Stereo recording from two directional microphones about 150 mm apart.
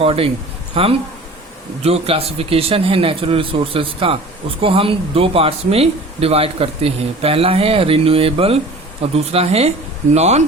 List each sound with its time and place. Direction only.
0.0 s a man's voice: 40° right (ahead or behind)